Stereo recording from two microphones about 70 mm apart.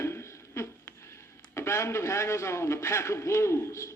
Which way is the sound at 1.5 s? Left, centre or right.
Left.